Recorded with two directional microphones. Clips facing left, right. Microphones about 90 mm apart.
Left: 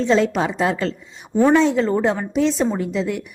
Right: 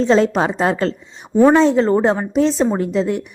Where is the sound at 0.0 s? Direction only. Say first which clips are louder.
Right 3 dB; 40° right (ahead or behind).